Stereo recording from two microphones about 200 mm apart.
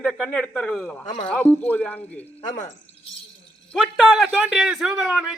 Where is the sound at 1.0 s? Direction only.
40° left (ahead or behind).